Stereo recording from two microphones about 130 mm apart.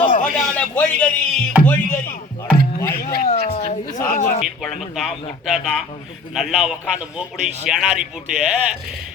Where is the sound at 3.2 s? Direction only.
55° left (ahead or behind).